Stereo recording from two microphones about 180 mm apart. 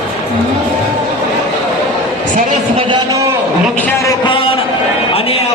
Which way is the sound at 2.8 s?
25° right (ahead or behind).